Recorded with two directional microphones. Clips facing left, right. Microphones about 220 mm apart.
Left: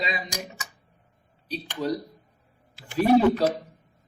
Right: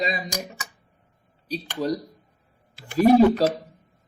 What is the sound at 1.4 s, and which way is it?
Speech, 40° right (ahead or behind).